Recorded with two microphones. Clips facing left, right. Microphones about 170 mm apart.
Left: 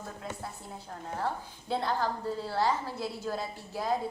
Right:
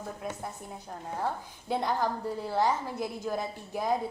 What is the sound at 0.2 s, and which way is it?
A woman's voice, 20° right (ahead or behind).